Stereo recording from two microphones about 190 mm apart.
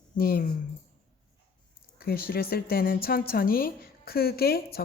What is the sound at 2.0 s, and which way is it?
A woman's voice, 55° left (ahead or behind).